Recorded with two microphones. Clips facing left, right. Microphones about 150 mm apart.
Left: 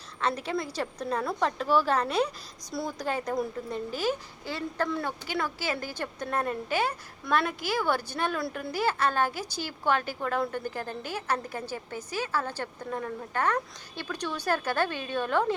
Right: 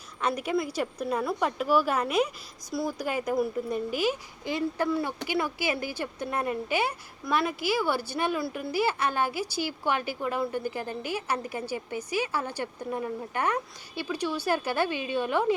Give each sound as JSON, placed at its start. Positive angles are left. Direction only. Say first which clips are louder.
{"t": 0.2, "sound": "speech", "louder": "right 2 dB", "side_deg": -10}